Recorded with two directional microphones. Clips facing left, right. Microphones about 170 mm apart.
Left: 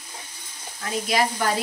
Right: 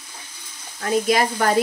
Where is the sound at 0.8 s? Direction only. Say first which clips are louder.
Right 5 dB; 50° right (ahead or behind).